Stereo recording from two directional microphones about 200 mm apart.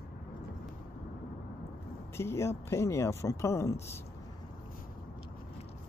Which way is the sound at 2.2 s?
15° left (ahead or behind).